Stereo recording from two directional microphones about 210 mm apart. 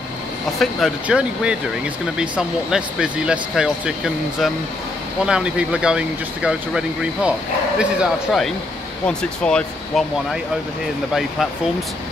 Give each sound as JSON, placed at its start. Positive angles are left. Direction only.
{"t": 0.6, "sound": "speech", "side_deg": 0}